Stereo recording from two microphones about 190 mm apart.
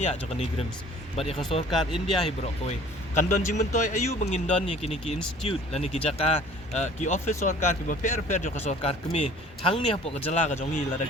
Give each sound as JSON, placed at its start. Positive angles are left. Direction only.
{"t": 0.0, "sound": "speech", "side_deg": 35}